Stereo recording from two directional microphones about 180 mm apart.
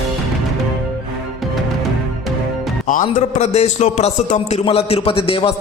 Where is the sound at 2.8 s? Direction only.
45° left (ahead or behind).